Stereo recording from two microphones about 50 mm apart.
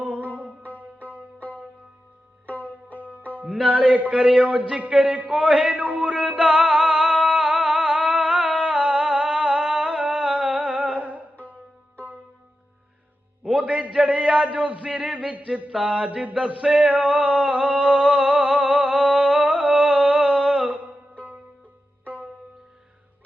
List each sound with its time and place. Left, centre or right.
0.0 s music: right
2.5 s music: left
3.2 s music: right
3.7 s a man's voice: right
4.2 s speech: centre
4.9 s music: centre
13.6 s a sound: right